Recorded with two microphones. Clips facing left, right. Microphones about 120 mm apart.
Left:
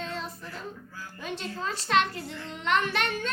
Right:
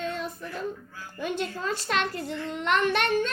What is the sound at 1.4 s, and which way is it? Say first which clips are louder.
A woman's voice: right 4 dB; 40° right (ahead or behind).